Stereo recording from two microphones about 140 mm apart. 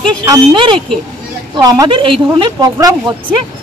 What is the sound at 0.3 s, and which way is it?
Speech, 35° right (ahead or behind).